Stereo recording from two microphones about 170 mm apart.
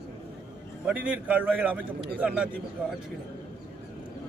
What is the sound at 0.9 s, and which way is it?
Speech, 10° right (ahead or behind).